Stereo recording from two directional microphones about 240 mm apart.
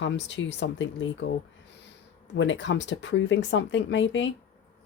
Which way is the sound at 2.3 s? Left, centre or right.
Left.